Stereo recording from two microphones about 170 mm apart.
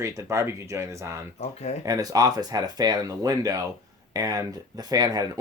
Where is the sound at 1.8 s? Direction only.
20° right (ahead or behind).